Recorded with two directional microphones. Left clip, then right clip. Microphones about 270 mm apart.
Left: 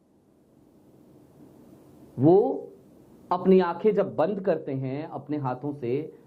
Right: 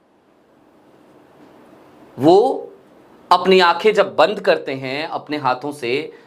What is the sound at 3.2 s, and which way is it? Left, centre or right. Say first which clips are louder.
Speech: right 10 dB; centre.